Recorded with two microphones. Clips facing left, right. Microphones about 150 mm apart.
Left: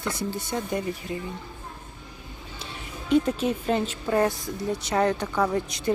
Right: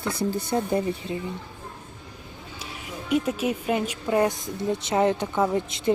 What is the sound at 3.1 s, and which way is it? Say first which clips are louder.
A woman's voice: left 2 dB; 10° right (ahead or behind).